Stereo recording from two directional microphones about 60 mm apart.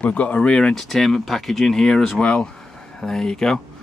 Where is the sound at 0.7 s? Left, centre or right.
Centre.